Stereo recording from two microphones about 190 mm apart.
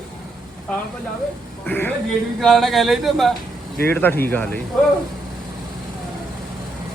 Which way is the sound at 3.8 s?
10° left (ahead or behind).